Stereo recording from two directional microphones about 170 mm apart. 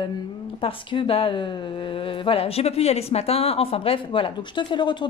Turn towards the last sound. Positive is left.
turn(degrees=30)  # may be behind; listen again after turning